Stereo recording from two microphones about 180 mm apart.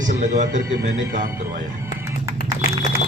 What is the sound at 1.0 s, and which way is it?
Speech, 15° right (ahead or behind).